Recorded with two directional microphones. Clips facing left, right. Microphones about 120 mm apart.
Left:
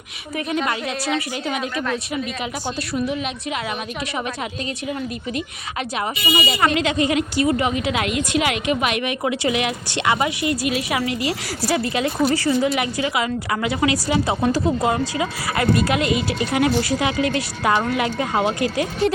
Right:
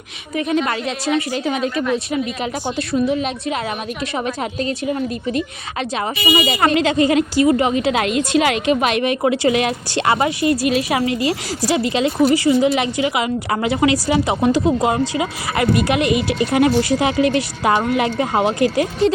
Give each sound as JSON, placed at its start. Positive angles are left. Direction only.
{"t": 2.6, "sound": "a woman's voice", "side_deg": -20}
{"t": 3.2, "sound": "speech", "side_deg": -35}
{"t": 6.0, "sound": "speech", "side_deg": -35}
{"t": 12.7, "sound": "a woman's voice", "side_deg": -25}